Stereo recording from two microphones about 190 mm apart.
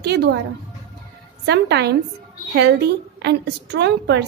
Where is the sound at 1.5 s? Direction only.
60° right (ahead or behind).